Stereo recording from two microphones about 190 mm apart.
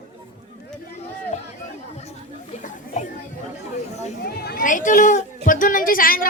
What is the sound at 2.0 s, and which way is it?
Chatter, 35° left (ahead or behind).